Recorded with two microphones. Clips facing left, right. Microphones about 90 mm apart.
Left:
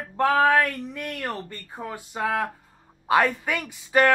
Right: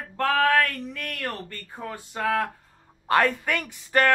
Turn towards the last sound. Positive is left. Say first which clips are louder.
# left 2 dB
turn(degrees=5)  # may be behind; listen again after turning